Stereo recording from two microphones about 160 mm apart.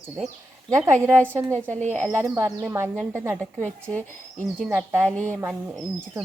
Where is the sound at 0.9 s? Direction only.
15° right (ahead or behind).